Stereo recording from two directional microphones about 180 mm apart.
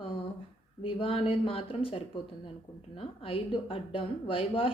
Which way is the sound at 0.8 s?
30° left (ahead or behind).